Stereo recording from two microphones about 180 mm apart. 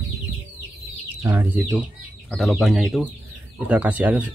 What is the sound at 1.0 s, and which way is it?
Speech, 15° right (ahead or behind).